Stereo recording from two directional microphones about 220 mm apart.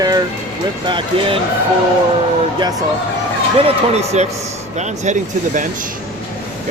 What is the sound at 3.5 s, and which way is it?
Speech, 25° right (ahead or behind).